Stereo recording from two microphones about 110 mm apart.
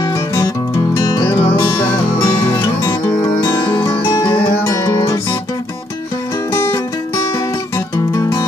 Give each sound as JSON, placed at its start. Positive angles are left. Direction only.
{"t": 0.0, "sound": "music", "side_deg": 35}
{"t": 4.1, "sound": "music", "side_deg": 35}
{"t": 6.5, "sound": "music", "side_deg": 30}